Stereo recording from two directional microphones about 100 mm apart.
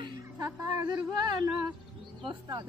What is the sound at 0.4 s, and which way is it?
A woman's voice, 40° right (ahead or behind).